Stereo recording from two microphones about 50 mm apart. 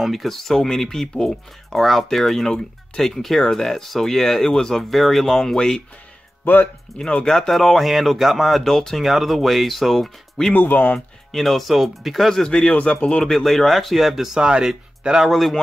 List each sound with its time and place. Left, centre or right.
0.0 s speech: centre
6.4 s speech: left
7.2 s speech: centre
10.5 s speech: left
11.3 s speech: centre
12.4 s speech: centre
13.3 s speech: centre
15.2 s speech: centre